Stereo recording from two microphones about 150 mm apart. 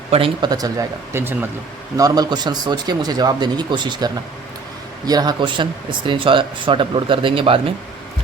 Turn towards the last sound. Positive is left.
turn(degrees=-35)  # may be behind; listen again after turning